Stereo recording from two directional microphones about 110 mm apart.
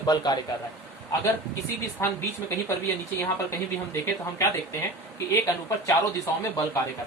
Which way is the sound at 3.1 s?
25° left (ahead or behind).